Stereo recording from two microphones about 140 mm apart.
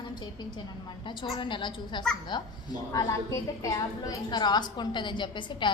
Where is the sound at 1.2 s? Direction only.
35° left (ahead or behind).